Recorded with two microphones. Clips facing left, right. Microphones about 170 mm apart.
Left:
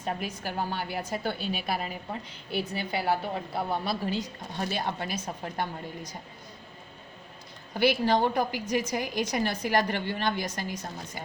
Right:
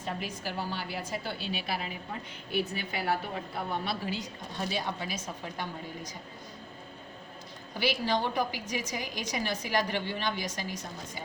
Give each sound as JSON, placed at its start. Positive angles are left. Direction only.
{"t": 0.2, "sound": "a woman's voice", "side_deg": 50}
{"t": 4.7, "sound": "a woman's voice", "side_deg": 55}
{"t": 7.8, "sound": "a woman's voice", "side_deg": 55}